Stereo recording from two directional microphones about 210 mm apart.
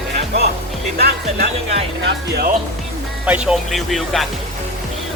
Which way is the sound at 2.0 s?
50° right (ahead or behind).